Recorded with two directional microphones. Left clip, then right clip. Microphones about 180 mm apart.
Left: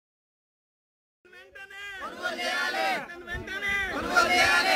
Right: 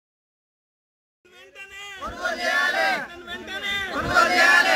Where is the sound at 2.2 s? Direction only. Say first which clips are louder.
Right 7 dB; 45° left (ahead or behind).